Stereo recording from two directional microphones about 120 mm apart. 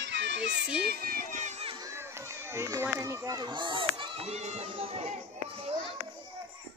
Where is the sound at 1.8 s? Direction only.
25° right (ahead or behind); by 4.2 s 45° right (ahead or behind).